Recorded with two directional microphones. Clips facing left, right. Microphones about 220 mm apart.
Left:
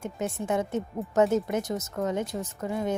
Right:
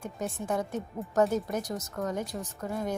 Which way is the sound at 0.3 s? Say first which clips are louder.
Left 4 dB; 25° left (ahead or behind).